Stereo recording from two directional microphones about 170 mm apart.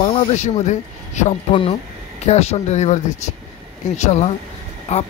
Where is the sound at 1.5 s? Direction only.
30° left (ahead or behind).